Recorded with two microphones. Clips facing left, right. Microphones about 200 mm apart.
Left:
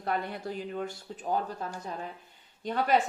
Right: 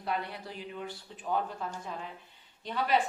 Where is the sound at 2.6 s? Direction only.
45° left (ahead or behind).